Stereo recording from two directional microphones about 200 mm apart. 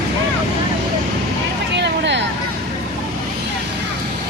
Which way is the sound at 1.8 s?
60° right (ahead or behind).